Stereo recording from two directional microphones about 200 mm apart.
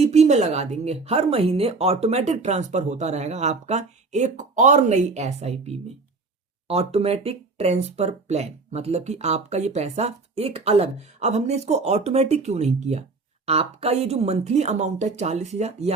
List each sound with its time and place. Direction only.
0.0 s speech: 35° right (ahead or behind)